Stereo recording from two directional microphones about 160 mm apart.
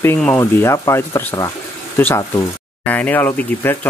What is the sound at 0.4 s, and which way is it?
Speech, 20° left (ahead or behind).